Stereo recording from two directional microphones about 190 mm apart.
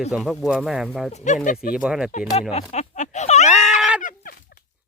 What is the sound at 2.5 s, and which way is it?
Speech, 35° left (ahead or behind).